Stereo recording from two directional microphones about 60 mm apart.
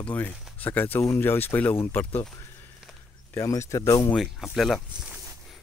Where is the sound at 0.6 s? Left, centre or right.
Left.